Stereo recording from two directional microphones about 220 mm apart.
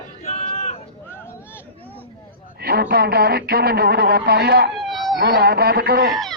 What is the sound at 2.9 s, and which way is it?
A man's voice, 45° right (ahead or behind).